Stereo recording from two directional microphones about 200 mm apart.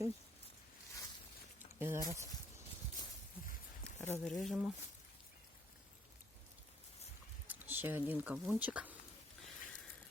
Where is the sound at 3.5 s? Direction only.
45° left (ahead or behind).